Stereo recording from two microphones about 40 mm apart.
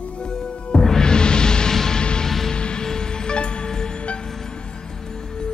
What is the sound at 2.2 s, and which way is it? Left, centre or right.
Music, centre.